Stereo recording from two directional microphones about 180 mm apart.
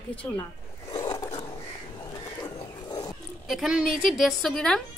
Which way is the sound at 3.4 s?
Centre (ahead or behind).